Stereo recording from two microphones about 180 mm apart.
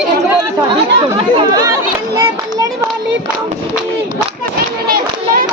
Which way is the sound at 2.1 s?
20° right (ahead or behind).